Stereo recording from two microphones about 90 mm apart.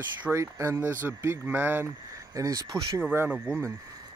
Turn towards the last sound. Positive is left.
turn(degrees=-20)  # may be behind; listen again after turning